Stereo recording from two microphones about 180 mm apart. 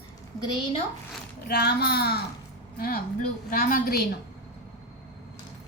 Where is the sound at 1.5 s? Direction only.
60° left (ahead or behind).